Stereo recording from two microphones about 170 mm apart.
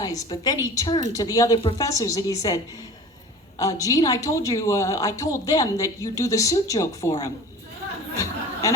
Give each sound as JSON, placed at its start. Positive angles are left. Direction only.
{"t": 0.0, "sound": "speech", "side_deg": 20}
{"t": 3.6, "sound": "speech", "side_deg": 20}
{"t": 8.1, "sound": "chatter", "side_deg": 20}